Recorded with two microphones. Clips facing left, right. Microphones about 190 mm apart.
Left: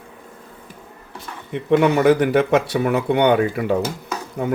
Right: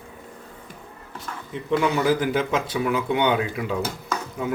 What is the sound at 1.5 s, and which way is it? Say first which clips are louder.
Speech: left 6 dB; 60° left (ahead or behind).